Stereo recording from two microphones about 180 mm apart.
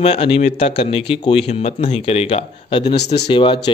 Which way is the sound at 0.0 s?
30° left (ahead or behind).